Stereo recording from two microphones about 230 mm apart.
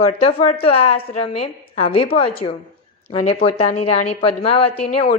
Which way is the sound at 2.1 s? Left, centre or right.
Left.